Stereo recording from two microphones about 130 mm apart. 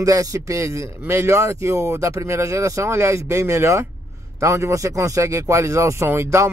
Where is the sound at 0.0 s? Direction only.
25° right (ahead or behind).